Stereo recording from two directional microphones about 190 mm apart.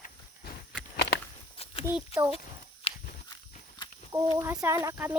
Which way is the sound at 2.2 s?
25° right (ahead or behind).